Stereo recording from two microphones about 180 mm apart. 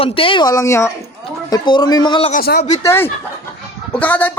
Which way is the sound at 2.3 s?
60° left (ahead or behind).